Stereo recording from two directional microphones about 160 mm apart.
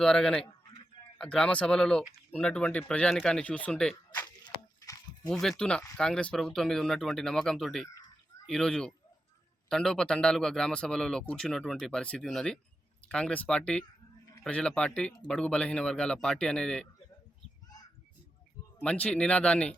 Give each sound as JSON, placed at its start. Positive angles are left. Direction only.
{"t": 0.0, "sound": "speech", "side_deg": 5}
{"t": 4.4, "sound": "a sound", "side_deg": 20}
{"t": 5.3, "sound": "speech", "side_deg": 5}
{"t": 18.8, "sound": "speech", "side_deg": 5}